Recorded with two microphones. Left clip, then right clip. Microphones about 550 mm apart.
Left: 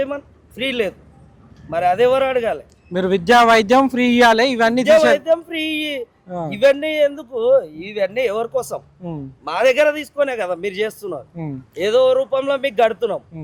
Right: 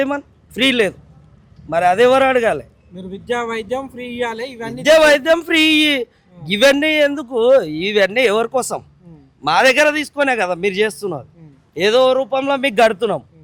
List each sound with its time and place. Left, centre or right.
0.0 s a man's voice: right
2.9 s speech: left
4.9 s a man's voice: right